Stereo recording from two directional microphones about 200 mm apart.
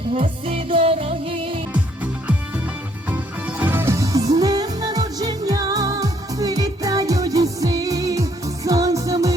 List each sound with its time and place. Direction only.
0.1 s music: 30° right (ahead or behind)
1.7 s music: 5° right (ahead or behind)